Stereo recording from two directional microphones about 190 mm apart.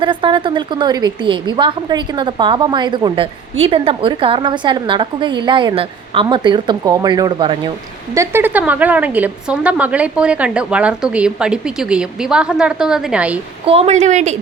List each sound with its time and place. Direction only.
0.0 s a woman's voice: 25° right (ahead or behind); by 13.4 s 5° right (ahead or behind)
13.7 s a woman's voice: 35° right (ahead or behind)